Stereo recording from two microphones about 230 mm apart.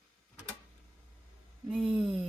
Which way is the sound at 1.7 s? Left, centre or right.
Centre.